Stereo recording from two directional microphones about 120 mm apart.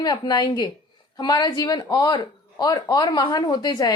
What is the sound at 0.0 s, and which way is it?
A woman's voice, 35° left (ahead or behind).